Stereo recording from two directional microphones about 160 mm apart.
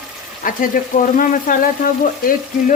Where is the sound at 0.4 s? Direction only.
55° left (ahead or behind).